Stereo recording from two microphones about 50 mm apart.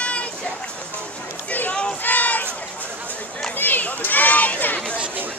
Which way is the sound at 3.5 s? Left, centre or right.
Left.